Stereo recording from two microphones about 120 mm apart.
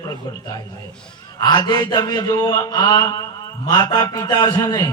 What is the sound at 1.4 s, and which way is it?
A man's voice, 35° left (ahead or behind).